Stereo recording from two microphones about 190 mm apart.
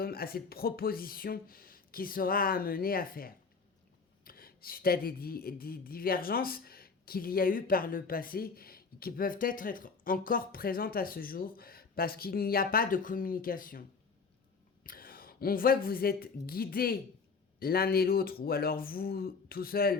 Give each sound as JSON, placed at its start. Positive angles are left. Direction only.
{"t": 0.0, "sound": "speech", "side_deg": 50}
{"t": 14.8, "sound": "a woman's voice", "side_deg": 50}